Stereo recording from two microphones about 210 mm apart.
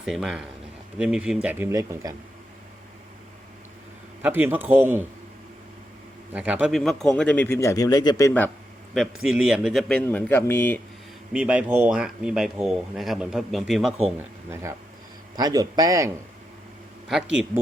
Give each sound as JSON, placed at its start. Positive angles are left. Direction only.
{"t": 0.0, "sound": "speech", "side_deg": 0}
{"t": 4.2, "sound": "speech", "side_deg": -10}
{"t": 6.3, "sound": "speech", "side_deg": -5}
{"t": 9.0, "sound": "speech", "side_deg": -5}
{"t": 11.3, "sound": "speech", "side_deg": -5}
{"t": 14.5, "sound": "speech", "side_deg": -15}